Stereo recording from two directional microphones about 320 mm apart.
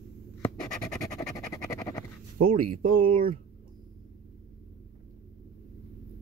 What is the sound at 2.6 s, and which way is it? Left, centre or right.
Speech, right.